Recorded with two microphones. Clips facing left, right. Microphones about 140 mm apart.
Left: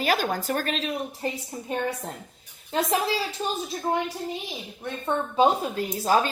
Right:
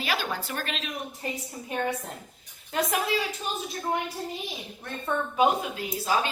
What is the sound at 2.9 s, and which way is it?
Speech, 30° left (ahead or behind).